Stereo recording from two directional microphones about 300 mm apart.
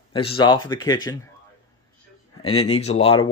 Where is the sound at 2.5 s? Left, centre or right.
Centre.